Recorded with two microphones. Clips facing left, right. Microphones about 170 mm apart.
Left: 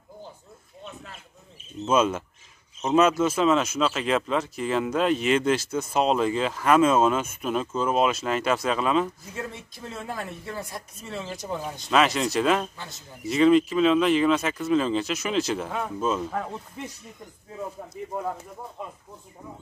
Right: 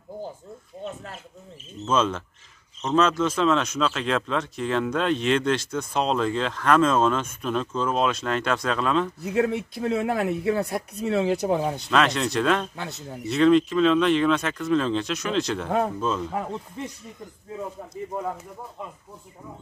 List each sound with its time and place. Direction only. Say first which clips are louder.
0.8 s speech: right 6 dB; 45° right (ahead or behind)
1.9 s speech: left 1 dB; 10° left (ahead or behind)
9.2 s speech: right 12 dB; 65° right (ahead or behind)
11.9 s speech: left 2 dB; 5° left (ahead or behind)
12.7 s speech: right 7 dB; 65° right (ahead or behind)
13.2 s speech: even; centre (ahead or behind)